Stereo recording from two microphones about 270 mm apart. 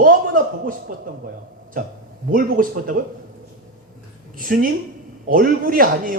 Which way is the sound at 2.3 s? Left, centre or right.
Right.